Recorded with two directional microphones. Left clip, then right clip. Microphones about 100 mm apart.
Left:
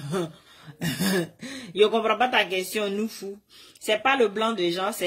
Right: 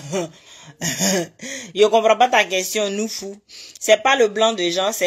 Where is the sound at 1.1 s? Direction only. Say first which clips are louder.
Right 5 dB; 25° left (ahead or behind).